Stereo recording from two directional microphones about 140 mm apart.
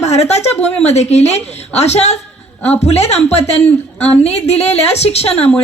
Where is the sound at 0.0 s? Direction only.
50° left (ahead or behind).